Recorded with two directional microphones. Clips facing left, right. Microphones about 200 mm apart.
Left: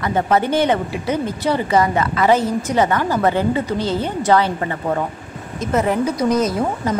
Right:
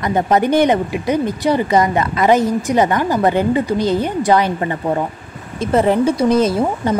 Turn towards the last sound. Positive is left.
turn(degrees=-30)  # may be behind; listen again after turning